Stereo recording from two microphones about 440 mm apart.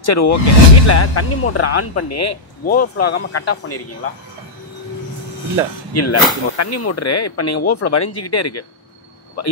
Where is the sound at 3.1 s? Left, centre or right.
Left.